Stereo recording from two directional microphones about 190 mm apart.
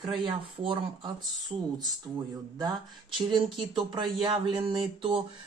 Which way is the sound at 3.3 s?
25° right (ahead or behind).